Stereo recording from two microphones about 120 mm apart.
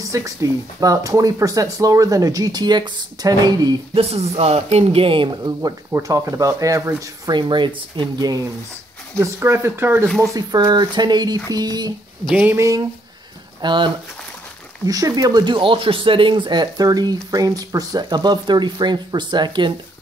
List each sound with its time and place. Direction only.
0.0 s speech: 25° right (ahead or behind)
3.9 s speech: 55° right (ahead or behind); by 5.8 s 35° right (ahead or behind)
5.9 s speech: 25° right (ahead or behind)
7.2 s speech: 40° right (ahead or behind)
9.2 s speech: 20° right (ahead or behind)
10.0 s speech: centre (ahead or behind)
10.3 s speech: 35° right (ahead or behind)
12.4 s speech: 15° right (ahead or behind)
13.6 s speech: 40° right (ahead or behind)
14.9 s speech: 30° right (ahead or behind)